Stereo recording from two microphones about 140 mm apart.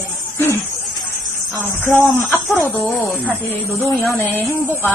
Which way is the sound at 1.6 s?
15° left (ahead or behind).